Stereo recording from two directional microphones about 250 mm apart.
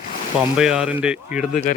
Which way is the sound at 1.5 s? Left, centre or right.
Left.